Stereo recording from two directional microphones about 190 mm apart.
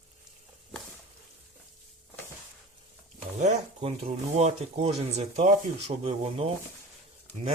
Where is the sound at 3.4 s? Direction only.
35° right (ahead or behind).